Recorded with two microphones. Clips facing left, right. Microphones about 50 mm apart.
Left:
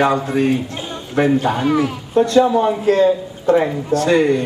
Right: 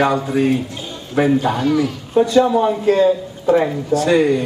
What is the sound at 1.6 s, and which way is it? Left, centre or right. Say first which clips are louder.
Speech: even; left.